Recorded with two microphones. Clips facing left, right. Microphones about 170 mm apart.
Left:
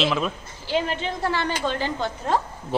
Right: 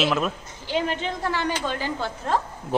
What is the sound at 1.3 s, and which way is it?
Speech, 10° right (ahead or behind).